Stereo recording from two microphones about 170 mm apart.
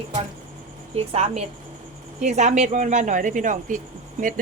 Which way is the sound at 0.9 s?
40° right (ahead or behind).